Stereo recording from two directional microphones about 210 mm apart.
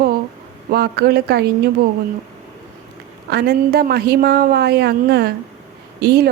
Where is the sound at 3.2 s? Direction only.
50° right (ahead or behind).